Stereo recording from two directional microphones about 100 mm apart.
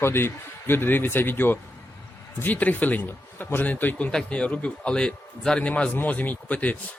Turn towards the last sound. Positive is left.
turn(degrees=15)  # may be behind; listen again after turning